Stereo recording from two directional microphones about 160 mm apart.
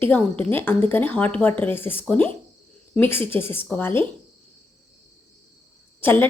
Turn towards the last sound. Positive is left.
turn(degrees=10)  # may be behind; listen again after turning